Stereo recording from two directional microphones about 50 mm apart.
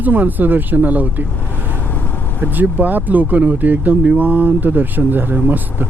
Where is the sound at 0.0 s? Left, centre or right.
Right.